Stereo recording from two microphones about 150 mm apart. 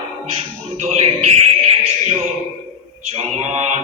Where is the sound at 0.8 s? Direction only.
50° right (ahead or behind).